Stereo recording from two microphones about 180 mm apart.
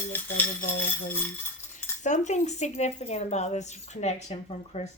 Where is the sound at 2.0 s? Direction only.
40° left (ahead or behind).